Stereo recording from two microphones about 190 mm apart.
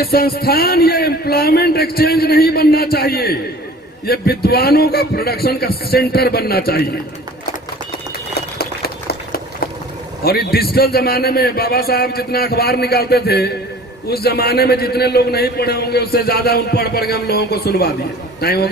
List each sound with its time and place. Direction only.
0.0 s a man's voice: 55° left (ahead or behind)
8.5 s a sound: 55° left (ahead or behind)
10.2 s a man's voice: 55° left (ahead or behind)